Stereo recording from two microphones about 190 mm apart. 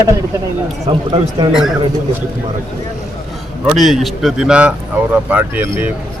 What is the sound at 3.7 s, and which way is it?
Speech, centre (ahead or behind).